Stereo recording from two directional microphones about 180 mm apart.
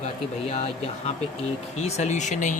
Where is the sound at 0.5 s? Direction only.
35° left (ahead or behind).